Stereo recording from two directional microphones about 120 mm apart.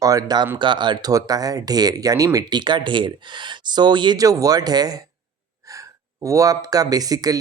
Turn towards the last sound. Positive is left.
turn(degrees=-30)  # may be behind; listen again after turning